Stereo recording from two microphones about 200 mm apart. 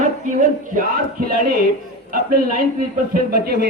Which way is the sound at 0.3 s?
40° right (ahead or behind).